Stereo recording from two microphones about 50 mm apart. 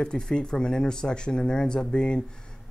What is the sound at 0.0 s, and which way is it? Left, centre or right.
Speech, centre.